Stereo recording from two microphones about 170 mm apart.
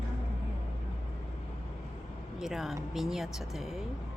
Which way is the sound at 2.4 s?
Centre (ahead or behind).